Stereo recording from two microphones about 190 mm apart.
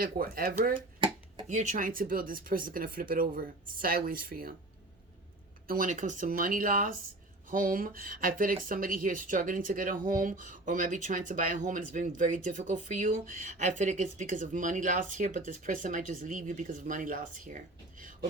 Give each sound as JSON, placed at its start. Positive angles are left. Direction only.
{"t": 0.0, "sound": "speech", "side_deg": -50}
{"t": 0.9, "sound": "a sound", "side_deg": -25}
{"t": 1.5, "sound": "speech", "side_deg": -40}
{"t": 5.6, "sound": "speech", "side_deg": -45}